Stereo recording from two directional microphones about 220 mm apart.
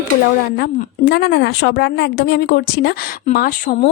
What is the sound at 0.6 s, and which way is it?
Speech, 50° left (ahead or behind).